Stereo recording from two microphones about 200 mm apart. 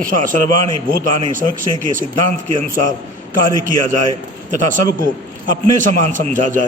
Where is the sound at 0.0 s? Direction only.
40° right (ahead or behind).